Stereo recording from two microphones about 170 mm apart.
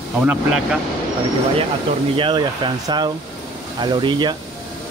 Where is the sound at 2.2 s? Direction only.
30° right (ahead or behind).